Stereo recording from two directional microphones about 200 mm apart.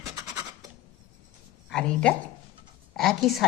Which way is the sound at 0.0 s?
15° right (ahead or behind).